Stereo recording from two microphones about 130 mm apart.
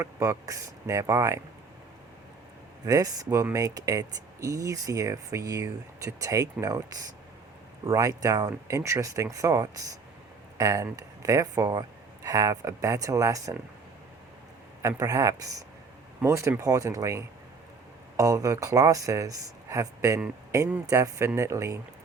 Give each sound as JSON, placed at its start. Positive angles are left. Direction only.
{"t": 0.0, "sound": "speech", "side_deg": -25}
{"t": 2.8, "sound": "speech", "side_deg": -30}
{"t": 14.8, "sound": "speech", "side_deg": -25}